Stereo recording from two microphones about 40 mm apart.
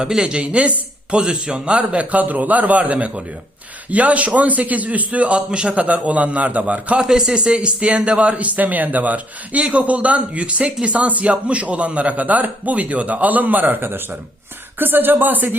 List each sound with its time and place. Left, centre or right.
0.2 s speech: right
1.1 s speech: centre; by 5.4 s right
5.5 s speech: right
5.7 s speech: right
7.0 s speech: centre; by 10.4 s right
10.4 s speech: right